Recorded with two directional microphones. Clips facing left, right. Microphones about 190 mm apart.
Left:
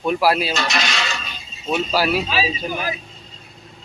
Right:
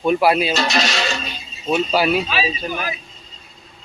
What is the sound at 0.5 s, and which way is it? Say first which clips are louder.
Music: right 3 dB; 35° right (ahead or behind).